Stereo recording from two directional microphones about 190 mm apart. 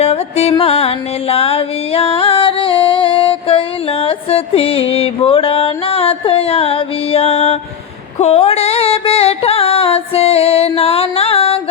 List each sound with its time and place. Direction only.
0.0 s music: 35° left (ahead or behind)